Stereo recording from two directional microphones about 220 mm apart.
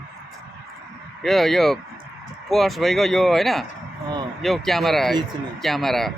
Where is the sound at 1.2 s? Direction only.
Centre (ahead or behind).